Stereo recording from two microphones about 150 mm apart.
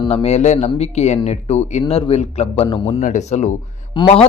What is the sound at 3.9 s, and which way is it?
Speech, 35° left (ahead or behind).